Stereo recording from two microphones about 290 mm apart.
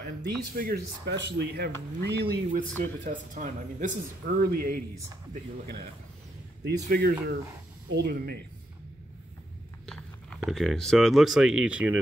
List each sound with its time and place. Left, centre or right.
0.2 s speech: right
6.6 s speech: right
9.8 s speech: centre